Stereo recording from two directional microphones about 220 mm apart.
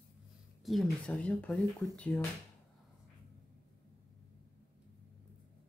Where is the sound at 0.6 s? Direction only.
Centre (ahead or behind).